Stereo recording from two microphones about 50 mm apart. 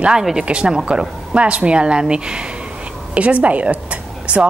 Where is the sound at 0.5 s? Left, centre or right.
Right.